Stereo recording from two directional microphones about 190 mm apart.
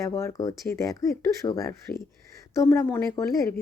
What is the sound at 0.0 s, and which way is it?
Speech, 15° left (ahead or behind).